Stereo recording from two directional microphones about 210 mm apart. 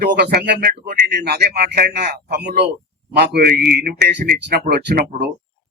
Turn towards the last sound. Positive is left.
turn(degrees=-45)  # may be behind; listen again after turning